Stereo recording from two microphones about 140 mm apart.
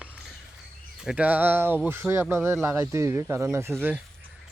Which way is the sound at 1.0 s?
5° right (ahead or behind).